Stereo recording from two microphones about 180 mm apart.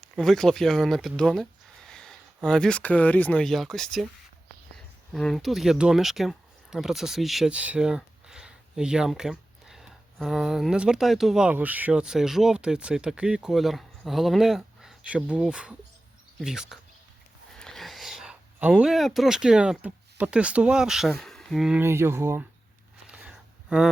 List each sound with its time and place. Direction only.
0.2 s speech: centre (ahead or behind)
5.1 s speech: centre (ahead or behind)
21.8 s speech: 15° right (ahead or behind)
23.0 s a sound: 5° right (ahead or behind)